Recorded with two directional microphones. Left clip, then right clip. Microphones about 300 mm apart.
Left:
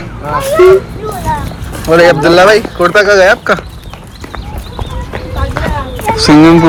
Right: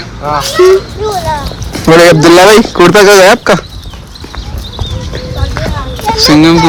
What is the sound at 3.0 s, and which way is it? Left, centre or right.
Speech, right.